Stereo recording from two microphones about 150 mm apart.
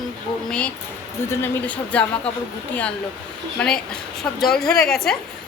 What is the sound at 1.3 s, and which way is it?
Speech, 15° left (ahead or behind).